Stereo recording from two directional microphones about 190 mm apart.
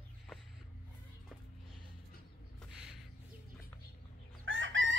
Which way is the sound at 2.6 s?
5° right (ahead or behind).